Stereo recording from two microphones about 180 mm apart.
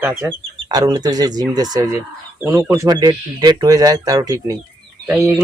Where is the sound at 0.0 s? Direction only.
10° right (ahead or behind).